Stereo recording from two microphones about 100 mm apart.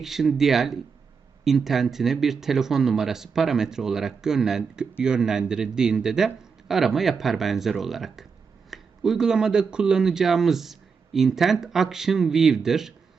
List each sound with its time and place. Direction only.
0.0 s speech: 5° right (ahead or behind)